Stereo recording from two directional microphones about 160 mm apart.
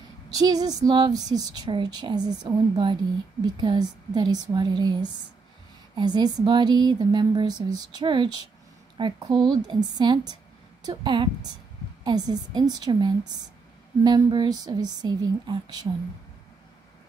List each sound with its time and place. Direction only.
0.3 s speech: 25° right (ahead or behind)
5.9 s speech: 25° right (ahead or behind)